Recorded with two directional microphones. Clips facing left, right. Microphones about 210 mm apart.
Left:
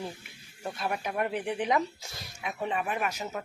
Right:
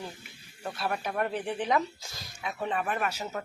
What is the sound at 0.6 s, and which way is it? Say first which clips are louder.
Speech: even; 10° left (ahead or behind).